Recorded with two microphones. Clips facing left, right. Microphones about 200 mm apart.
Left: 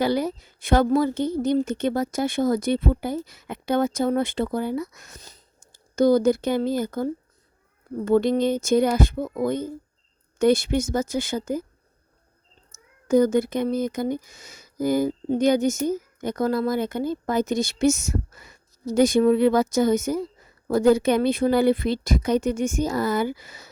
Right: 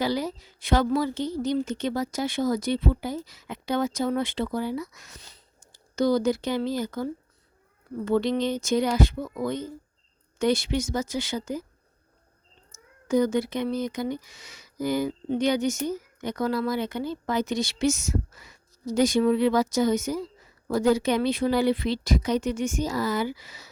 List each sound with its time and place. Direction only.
0.0 s speech: 55° left (ahead or behind)
13.1 s speech: 50° left (ahead or behind)